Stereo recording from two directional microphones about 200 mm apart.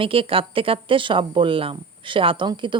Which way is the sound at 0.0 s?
25° right (ahead or behind).